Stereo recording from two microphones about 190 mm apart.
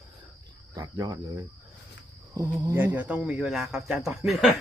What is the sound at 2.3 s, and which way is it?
A man's voice, 15° right (ahead or behind).